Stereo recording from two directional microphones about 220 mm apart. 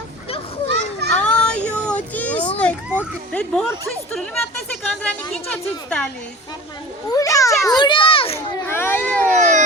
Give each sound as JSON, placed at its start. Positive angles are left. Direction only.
{"t": 0.3, "sound": "children playing", "side_deg": 25}
{"t": 1.2, "sound": "child singing", "side_deg": 5}
{"t": 2.6, "sound": "a woman's voice", "side_deg": 5}
{"t": 7.1, "sound": "a child's voice", "side_deg": 15}
{"t": 7.6, "sound": "children playing", "side_deg": 20}
{"t": 8.6, "sound": "a sound", "side_deg": 10}
{"t": 9.3, "sound": "a sound", "side_deg": -35}